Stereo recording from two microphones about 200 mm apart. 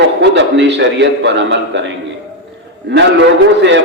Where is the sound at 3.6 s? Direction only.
65° right (ahead or behind).